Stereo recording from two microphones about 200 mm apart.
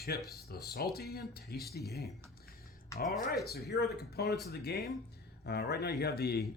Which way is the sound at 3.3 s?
50° left (ahead or behind).